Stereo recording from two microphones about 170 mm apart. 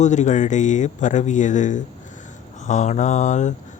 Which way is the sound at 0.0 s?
45° left (ahead or behind).